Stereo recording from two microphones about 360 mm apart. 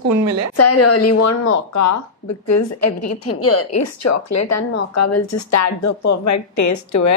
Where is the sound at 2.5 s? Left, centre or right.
Left.